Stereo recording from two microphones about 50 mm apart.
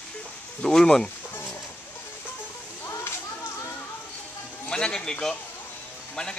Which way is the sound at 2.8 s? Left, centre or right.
Left.